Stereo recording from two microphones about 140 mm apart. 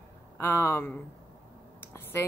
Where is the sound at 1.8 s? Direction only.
15° left (ahead or behind).